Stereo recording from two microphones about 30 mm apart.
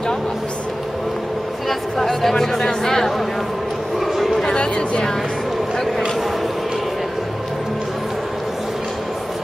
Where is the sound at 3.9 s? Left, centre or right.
Centre.